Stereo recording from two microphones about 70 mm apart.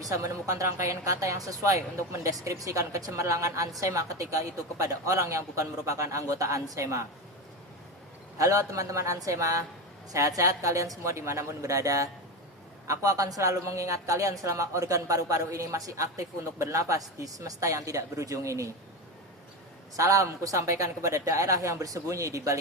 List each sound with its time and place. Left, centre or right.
0.0 s speech: right
8.4 s speech: right
20.0 s speech: right